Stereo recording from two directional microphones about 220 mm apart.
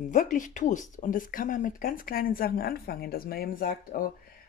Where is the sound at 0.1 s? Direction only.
35° left (ahead or behind).